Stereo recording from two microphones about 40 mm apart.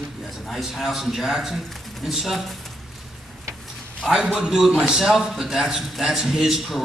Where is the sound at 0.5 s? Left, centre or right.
Centre.